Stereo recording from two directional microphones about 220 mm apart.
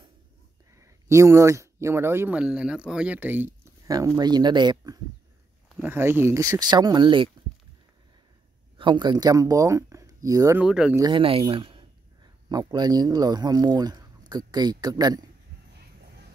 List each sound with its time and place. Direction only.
0.7 s speech: 15° right (ahead or behind)
8.7 s speech: 20° right (ahead or behind); by 11.0 s 5° right (ahead or behind)
11.0 s speech: 20° right (ahead or behind)